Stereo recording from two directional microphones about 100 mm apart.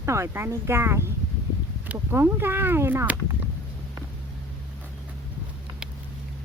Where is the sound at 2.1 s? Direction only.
20° right (ahead or behind).